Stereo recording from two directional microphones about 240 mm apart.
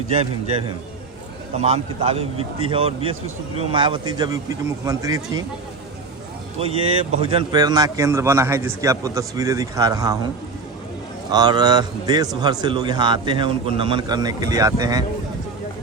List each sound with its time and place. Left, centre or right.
0.1 s a man's voice: right
6.6 s a man's voice: right
11.3 s a man's voice: centre